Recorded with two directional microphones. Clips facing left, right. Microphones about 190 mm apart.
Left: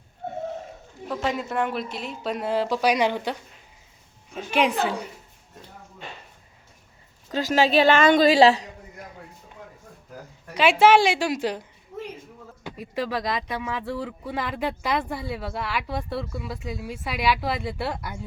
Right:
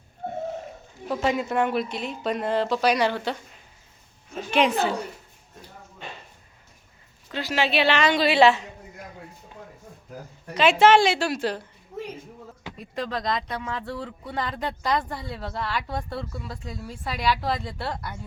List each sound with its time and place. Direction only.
1.0 s speech: centre (ahead or behind); by 3.3 s 15° left (ahead or behind)
4.5 s speech: 15° left (ahead or behind)
7.3 s a woman's voice: 40° left (ahead or behind)
10.5 s speech: 10° left (ahead or behind)
12.6 s speech: 5° left (ahead or behind)